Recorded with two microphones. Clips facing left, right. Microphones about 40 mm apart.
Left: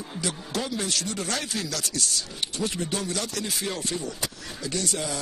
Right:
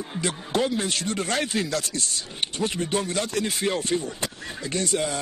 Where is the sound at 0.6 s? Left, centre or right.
Right.